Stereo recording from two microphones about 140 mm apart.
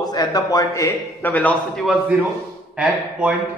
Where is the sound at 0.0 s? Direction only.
30° left (ahead or behind); by 1.5 s 10° left (ahead or behind).